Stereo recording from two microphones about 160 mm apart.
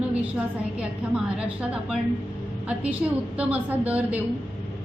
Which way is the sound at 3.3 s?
10° right (ahead or behind).